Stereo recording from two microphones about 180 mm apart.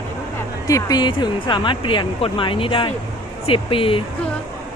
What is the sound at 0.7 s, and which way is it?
Speech, 20° left (ahead or behind).